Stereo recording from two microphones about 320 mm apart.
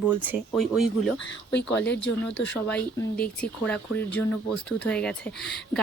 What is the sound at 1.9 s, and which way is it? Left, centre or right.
Speech, left.